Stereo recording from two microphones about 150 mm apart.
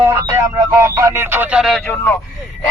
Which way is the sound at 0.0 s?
15° right (ahead or behind).